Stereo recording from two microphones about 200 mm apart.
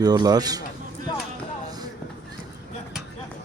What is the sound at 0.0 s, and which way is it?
Speech, 20° right (ahead or behind).